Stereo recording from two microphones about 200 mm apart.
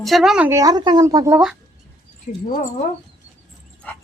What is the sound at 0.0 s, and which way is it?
Speech, centre (ahead or behind).